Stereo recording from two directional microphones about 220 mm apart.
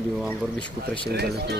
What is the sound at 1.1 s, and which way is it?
Speech, 45° right (ahead or behind).